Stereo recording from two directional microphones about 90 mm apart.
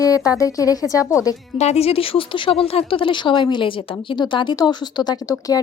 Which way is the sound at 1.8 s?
90° left.